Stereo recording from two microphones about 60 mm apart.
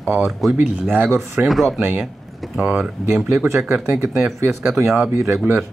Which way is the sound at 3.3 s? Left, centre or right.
Right.